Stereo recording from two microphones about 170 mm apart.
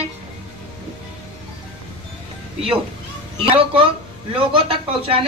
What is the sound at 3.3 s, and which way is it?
Speech, 35° right (ahead or behind).